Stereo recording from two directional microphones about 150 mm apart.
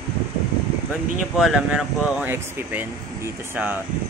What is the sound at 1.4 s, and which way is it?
Speech, 5° right (ahead or behind).